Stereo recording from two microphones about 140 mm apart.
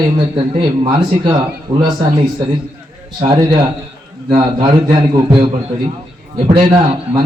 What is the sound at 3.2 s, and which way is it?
A man's voice, 35° right (ahead or behind).